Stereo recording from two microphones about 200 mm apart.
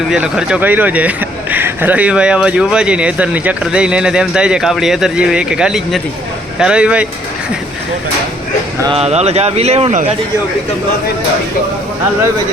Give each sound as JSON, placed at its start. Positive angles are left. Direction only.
{"t": 0.1, "sound": "speech", "side_deg": -5}
{"t": 8.8, "sound": "speech", "side_deg": -25}